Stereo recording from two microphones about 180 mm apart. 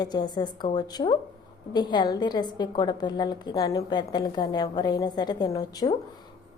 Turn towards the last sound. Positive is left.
turn(degrees=20)  # may be behind; listen again after turning